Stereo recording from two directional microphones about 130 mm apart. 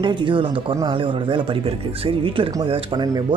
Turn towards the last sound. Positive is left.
turn(degrees=-30)  # may be behind; listen again after turning